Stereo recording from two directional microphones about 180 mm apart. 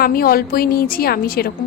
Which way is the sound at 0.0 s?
55° left (ahead or behind).